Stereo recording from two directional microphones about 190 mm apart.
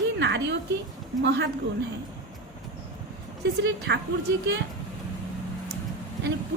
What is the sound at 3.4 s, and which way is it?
Speech, 60° right (ahead or behind).